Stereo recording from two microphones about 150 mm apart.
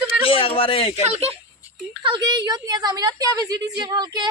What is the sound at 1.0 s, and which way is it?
Speech, 45° right (ahead or behind).